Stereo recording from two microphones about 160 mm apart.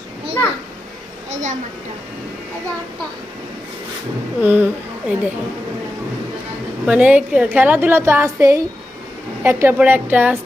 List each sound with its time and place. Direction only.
1.3 s a child's voice: 50° right (ahead or behind)
4.4 s a woman's voice: 10° right (ahead or behind)
6.8 s a woman's voice: 10° right (ahead or behind)